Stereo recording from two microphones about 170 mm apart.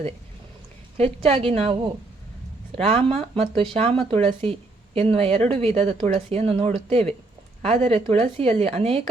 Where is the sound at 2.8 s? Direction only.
35° right (ahead or behind).